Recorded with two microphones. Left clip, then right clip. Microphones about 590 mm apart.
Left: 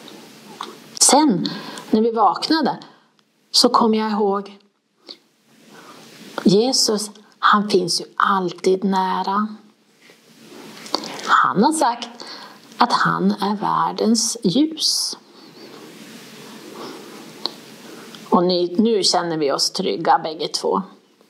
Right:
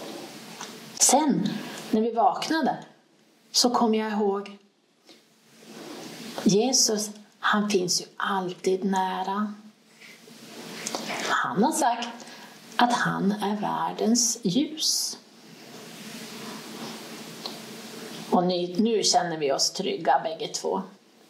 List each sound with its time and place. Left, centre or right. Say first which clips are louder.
0.9 s a sound: left 7 dB; left
2.0 s speech: left 6 dB; left
6.5 s a woman's voice: left 5 dB; left
10.9 s whispering: left 9 dB; left
12.8 s a woman's voice: left 7 dB; left
18.3 s speech: left 7 dB; left